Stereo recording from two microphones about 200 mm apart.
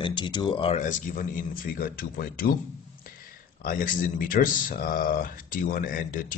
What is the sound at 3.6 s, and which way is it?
Speech, 45° left (ahead or behind).